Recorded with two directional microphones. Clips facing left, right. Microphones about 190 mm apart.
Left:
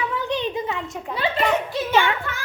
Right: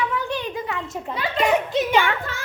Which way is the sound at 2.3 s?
35° right (ahead or behind).